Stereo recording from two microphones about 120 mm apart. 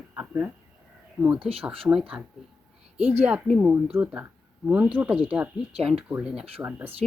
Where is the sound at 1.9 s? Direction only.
10° right (ahead or behind).